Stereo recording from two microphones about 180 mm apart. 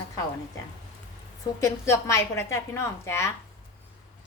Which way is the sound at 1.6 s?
15° left (ahead or behind).